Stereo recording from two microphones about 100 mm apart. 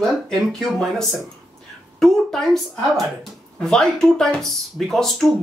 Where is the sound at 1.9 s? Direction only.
5° left (ahead or behind).